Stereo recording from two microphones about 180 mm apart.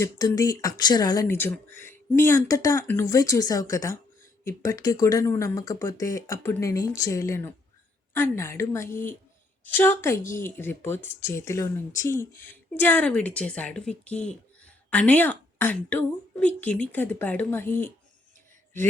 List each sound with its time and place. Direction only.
0.0 s speech: 20° left (ahead or behind)